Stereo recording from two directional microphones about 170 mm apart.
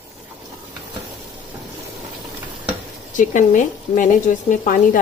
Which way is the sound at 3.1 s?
50° left (ahead or behind).